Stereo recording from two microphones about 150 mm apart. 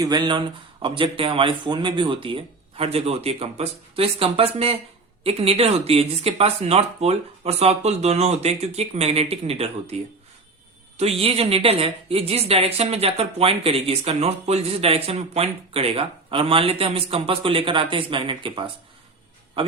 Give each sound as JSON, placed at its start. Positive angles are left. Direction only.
{"t": 0.0, "sound": "speech", "side_deg": -30}
{"t": 11.2, "sound": "speech", "side_deg": -40}
{"t": 19.6, "sound": "a sound", "side_deg": -35}